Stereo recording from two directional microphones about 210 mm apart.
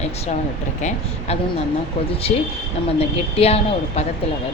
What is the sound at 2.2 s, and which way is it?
A woman's voice, 30° left (ahead or behind).